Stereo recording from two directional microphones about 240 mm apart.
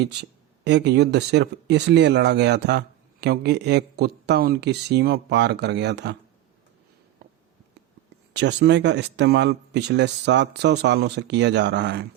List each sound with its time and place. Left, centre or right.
0.0 s speech: right
8.3 s speech: right